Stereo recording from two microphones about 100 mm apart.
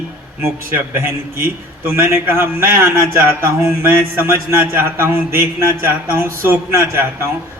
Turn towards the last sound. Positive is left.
turn(degrees=-25)  # may be behind; listen again after turning